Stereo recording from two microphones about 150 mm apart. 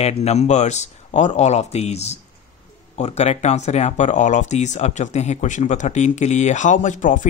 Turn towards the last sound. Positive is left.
turn(degrees=60)  # may be behind; listen again after turning